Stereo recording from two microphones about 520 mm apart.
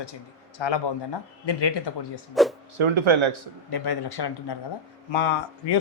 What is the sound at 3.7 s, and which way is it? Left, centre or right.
Speech, left.